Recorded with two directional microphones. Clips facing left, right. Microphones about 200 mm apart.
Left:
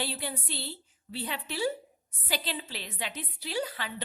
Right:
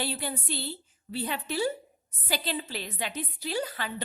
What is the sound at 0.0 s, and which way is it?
A woman's voice, 45° right (ahead or behind).